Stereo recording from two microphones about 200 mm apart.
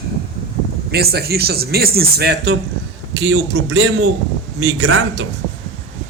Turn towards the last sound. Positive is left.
turn(degrees=-60)  # may be behind; listen again after turning